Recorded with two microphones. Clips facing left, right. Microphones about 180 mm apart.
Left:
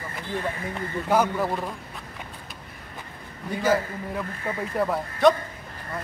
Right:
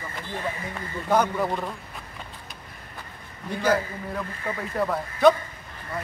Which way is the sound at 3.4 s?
Centre (ahead or behind).